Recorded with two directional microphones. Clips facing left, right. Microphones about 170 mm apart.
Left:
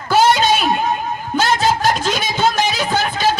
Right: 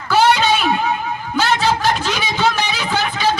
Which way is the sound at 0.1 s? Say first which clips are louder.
Left 1 dB; 45° left (ahead or behind).